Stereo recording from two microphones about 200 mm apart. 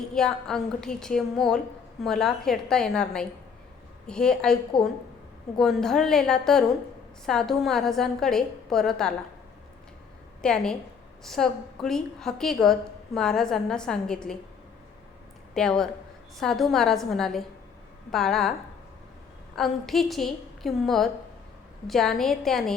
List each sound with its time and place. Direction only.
0.1 s a woman's voice: centre (ahead or behind)
10.4 s a woman's voice: 5° left (ahead or behind)
15.5 s a woman's voice: 5° left (ahead or behind)
19.5 s a woman's voice: centre (ahead or behind)